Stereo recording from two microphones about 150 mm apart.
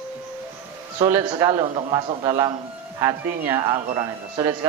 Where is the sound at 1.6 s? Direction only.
35° right (ahead or behind).